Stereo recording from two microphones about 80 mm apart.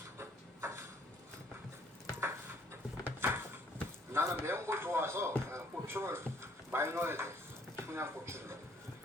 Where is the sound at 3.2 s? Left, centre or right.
Right.